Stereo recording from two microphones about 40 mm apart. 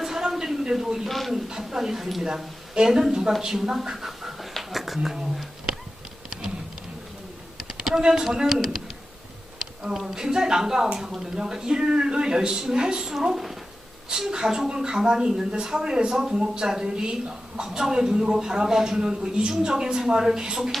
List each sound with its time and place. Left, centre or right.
0.0 s a sound: centre
1.0 s a man's voice: centre
1.3 s a woman's voice: centre
2.2 s a woman's voice: centre
3.9 s pant: centre
4.7 s a sound: centre
5.1 s speech: centre
7.7 s computer keyboard: centre
8.0 s a woman's voice: centre
13.1 s speech: centre
14.1 s a woman's voice: centre
17.7 s a woman's voice: centre